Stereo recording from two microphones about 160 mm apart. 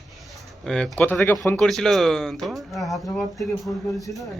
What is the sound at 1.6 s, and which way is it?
Speech, centre (ahead or behind).